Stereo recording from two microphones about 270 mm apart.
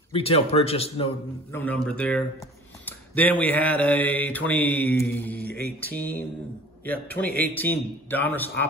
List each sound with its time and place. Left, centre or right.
0.1 s a man's voice: left
1.5 s mantra: centre